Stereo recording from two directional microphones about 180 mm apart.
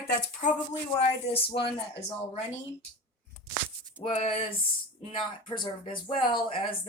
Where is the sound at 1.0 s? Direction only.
30° left (ahead or behind).